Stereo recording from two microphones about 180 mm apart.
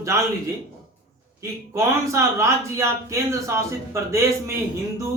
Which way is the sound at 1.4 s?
15° right (ahead or behind).